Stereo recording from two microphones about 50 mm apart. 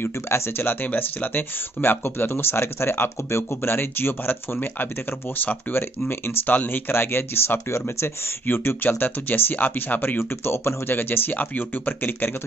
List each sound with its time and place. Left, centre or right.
0.0 s speech: left
0.8 s speech: left
6.9 s speech: left
8.5 s speech: left